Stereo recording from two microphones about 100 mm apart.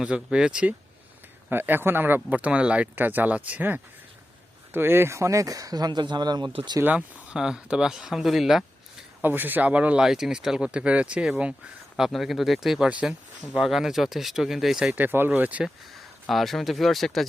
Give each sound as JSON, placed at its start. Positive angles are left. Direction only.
{"t": 0.0, "sound": "speech", "side_deg": -10}
{"t": 1.5, "sound": "speech", "side_deg": -20}
{"t": 6.5, "sound": "speech", "side_deg": -60}
{"t": 6.8, "sound": "speech", "side_deg": -10}
{"t": 9.2, "sound": "speech", "side_deg": -20}
{"t": 14.9, "sound": "speech", "side_deg": -20}
{"t": 16.3, "sound": "speech", "side_deg": 0}